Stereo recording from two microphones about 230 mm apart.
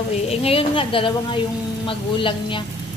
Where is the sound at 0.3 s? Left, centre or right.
Left.